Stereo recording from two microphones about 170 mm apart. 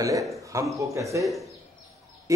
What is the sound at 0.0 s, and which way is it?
A man's voice, 20° right (ahead or behind).